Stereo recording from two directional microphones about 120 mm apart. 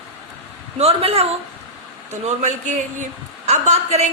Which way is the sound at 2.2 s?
85° right.